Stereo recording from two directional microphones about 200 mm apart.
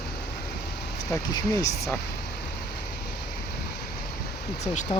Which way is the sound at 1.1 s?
20° left (ahead or behind).